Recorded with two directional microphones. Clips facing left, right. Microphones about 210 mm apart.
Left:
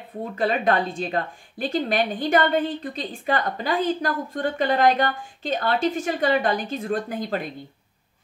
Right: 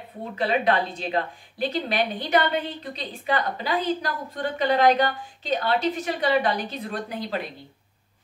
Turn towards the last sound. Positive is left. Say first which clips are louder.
# left 5 dB
turn(degrees=45)  # may be behind; listen again after turning